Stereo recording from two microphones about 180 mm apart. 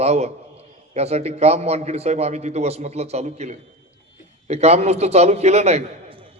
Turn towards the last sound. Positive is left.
turn(degrees=-35)  # may be behind; listen again after turning